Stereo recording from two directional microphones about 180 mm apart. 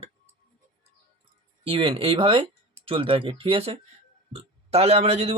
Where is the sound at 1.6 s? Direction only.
30° right (ahead or behind).